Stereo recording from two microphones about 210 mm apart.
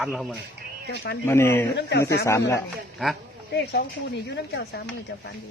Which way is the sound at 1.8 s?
55° left (ahead or behind).